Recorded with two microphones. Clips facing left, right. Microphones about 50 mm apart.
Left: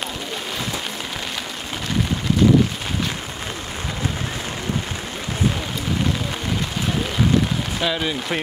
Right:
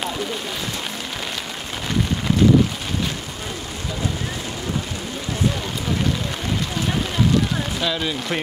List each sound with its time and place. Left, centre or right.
7.8 s speech: centre